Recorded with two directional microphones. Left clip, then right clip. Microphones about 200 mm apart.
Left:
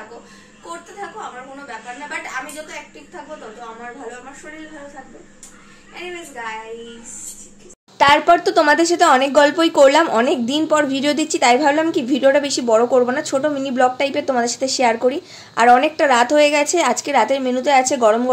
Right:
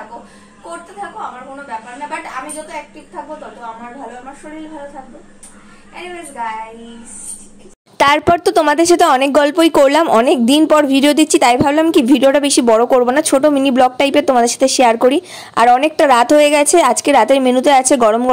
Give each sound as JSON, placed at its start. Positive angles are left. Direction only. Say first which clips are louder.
{"t": 8.0, "sound": "a woman's voice", "louder": "right 1 dB", "side_deg": -50}